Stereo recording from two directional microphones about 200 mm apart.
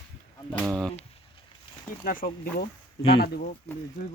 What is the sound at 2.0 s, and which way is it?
Speech, 45° left (ahead or behind).